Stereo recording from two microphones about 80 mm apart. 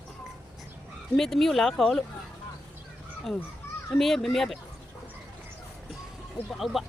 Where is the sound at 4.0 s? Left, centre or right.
Centre.